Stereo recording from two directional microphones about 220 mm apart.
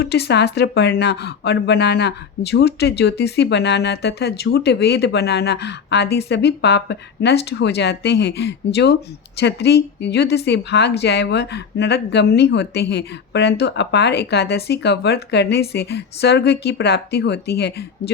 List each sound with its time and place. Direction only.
0.0 s speech: 50° left (ahead or behind)